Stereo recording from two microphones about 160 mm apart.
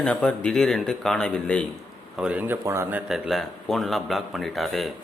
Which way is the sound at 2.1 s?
5° right (ahead or behind).